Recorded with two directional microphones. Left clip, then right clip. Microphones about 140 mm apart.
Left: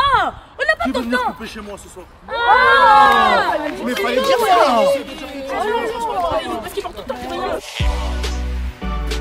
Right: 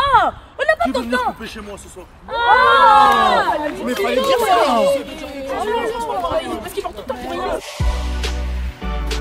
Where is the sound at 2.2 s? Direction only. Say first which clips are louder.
Even; 5° right (ahead or behind).